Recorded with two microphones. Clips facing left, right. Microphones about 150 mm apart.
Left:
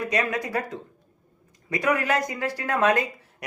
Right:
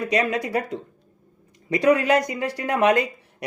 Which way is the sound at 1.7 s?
25° right (ahead or behind).